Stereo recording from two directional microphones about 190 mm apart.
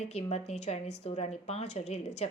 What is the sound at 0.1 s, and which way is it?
Speech, 35° left (ahead or behind).